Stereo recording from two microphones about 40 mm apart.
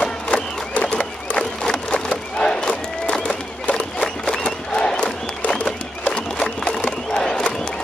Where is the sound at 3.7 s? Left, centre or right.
Centre.